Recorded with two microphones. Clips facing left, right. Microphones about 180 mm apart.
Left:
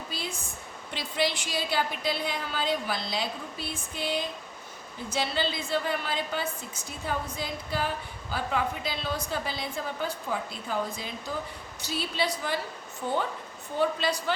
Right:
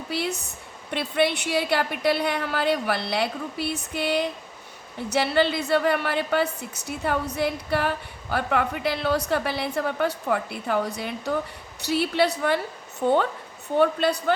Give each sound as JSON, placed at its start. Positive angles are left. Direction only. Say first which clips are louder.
{"t": 0.1, "sound": "a woman's voice", "louder": "right 8 dB", "side_deg": -70}